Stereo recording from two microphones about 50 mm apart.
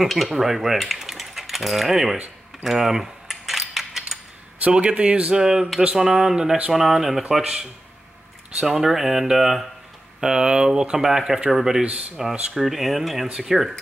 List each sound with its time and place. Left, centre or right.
0.0 s speech: centre
2.6 s cutlery: centre
4.7 s speech: right
5.4 s speech: centre
8.6 s speech: centre